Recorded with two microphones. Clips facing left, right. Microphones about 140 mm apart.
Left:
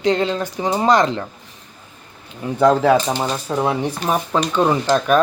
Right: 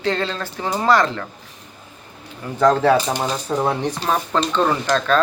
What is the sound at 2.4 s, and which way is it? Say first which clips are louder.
Speech: left 1 dB; 10° left (ahead or behind).